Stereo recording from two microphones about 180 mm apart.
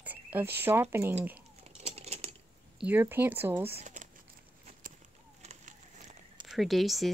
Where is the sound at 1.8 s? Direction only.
35° right (ahead or behind).